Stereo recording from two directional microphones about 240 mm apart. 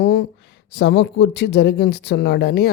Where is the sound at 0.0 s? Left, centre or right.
Left.